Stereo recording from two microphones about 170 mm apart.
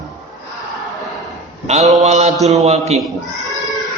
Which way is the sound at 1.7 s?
40° right (ahead or behind).